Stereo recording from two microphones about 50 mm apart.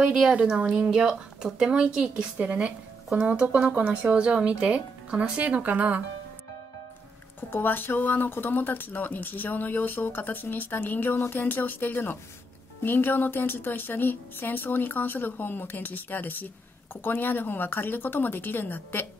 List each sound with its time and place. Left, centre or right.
0.3 s a woman's voice: right
7.3 s speech: left